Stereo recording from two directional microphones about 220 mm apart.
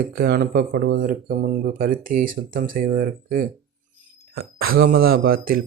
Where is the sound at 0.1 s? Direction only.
40° right (ahead or behind).